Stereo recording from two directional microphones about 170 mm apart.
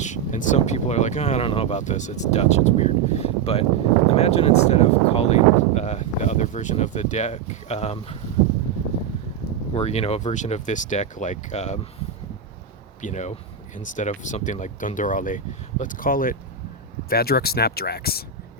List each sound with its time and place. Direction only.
0.0 s speech: 45° left (ahead or behind)
9.7 s speech: 40° left (ahead or behind)
13.0 s speech: 45° left (ahead or behind); by 18.6 s 65° left (ahead or behind)